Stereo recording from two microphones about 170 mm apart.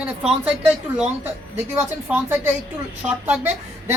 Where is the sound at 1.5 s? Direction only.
10° right (ahead or behind).